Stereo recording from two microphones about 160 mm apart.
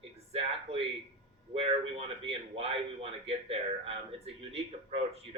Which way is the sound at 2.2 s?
35° right (ahead or behind).